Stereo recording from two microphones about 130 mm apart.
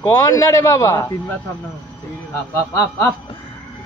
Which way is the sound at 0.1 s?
25° left (ahead or behind).